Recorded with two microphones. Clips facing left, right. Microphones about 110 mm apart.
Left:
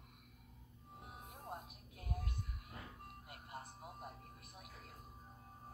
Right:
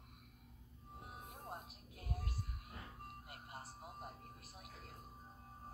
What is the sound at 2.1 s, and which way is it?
Music, 30° right (ahead or behind).